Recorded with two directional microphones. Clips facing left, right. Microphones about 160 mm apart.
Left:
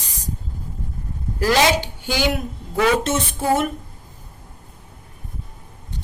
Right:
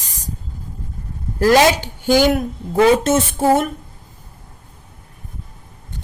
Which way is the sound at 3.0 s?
45° right (ahead or behind).